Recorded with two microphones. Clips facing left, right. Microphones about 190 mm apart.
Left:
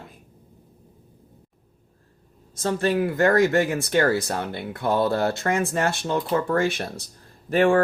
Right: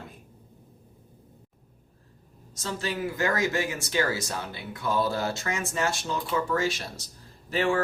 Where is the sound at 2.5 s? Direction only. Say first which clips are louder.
Left 9 dB; 55° left (ahead or behind).